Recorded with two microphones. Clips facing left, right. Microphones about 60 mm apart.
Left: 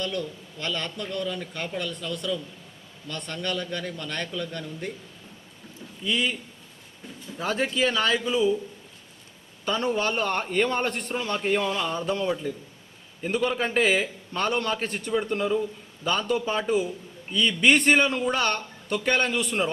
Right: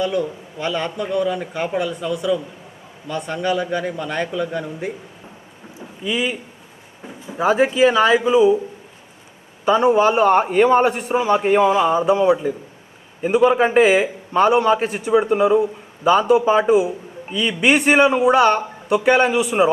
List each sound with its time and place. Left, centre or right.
0.0 s a man's voice: centre
6.0 s a man's voice: centre
9.6 s a man's voice: centre